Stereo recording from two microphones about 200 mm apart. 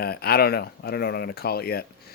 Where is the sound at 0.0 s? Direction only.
50° left (ahead or behind).